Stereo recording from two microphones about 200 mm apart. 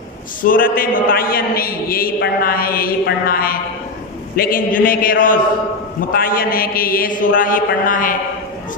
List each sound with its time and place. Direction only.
0.4 s a man's voice: 45° left (ahead or behind)